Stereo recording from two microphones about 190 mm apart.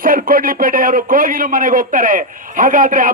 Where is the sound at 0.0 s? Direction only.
50° right (ahead or behind).